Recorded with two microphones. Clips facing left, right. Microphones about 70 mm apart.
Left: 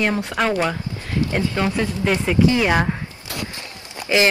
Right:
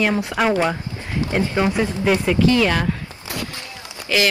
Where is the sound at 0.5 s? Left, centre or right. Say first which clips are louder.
Right 2 dB; right.